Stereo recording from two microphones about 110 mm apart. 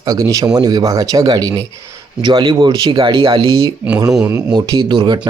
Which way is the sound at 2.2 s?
45° right (ahead or behind).